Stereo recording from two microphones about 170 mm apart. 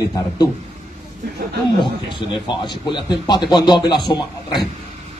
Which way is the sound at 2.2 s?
30° left (ahead or behind).